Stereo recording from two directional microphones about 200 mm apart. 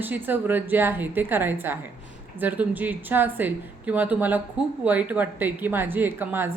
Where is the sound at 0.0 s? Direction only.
10° right (ahead or behind).